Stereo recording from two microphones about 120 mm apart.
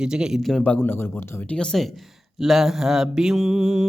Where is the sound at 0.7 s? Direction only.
15° left (ahead or behind).